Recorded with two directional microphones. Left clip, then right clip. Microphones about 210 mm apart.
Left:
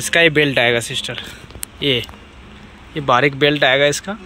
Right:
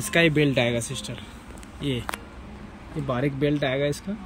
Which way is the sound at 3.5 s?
25° left (ahead or behind).